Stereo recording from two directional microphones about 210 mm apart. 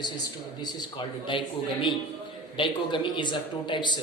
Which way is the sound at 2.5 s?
25° left (ahead or behind).